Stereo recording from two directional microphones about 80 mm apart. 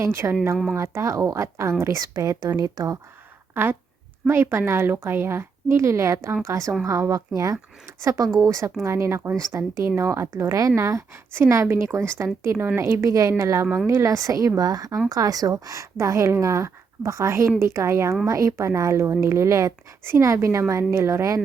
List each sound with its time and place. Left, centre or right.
0.0 s a woman's voice: right
0.5 s speech: centre
0.8 s a woman's voice: right
3.5 s a woman's voice: right
8.0 s a woman's voice: right